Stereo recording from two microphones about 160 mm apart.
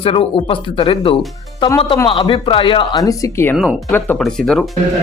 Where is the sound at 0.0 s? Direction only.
35° left (ahead or behind); by 3.5 s 20° left (ahead or behind).